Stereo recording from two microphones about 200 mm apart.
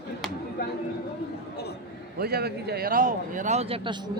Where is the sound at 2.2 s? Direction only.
50° right (ahead or behind); by 4.1 s 25° right (ahead or behind).